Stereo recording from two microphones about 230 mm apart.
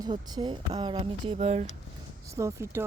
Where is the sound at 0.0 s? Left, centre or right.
Centre.